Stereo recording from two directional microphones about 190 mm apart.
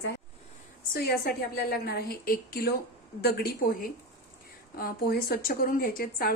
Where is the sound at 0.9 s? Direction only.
55° left (ahead or behind).